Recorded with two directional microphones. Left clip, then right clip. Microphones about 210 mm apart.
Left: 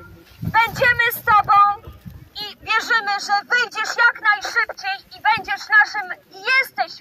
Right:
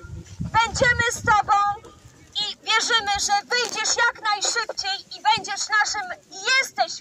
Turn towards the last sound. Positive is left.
turn(degrees=-55)  # may be behind; listen again after turning